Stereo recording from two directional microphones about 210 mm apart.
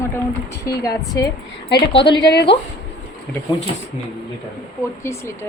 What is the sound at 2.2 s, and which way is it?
Speech, 50° left (ahead or behind).